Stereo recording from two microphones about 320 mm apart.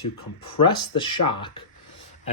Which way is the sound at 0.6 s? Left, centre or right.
Centre.